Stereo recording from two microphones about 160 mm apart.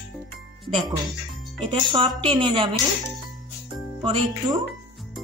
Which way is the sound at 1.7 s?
30° right (ahead or behind).